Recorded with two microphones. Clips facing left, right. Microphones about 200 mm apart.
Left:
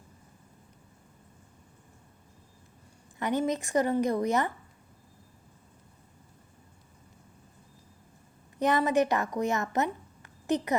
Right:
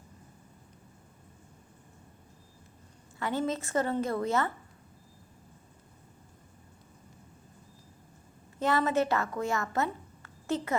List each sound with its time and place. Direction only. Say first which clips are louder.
3.2 s a woman's voice: left 3 dB; 20° left (ahead or behind)
8.5 s a woman's voice: left 2 dB; 15° left (ahead or behind)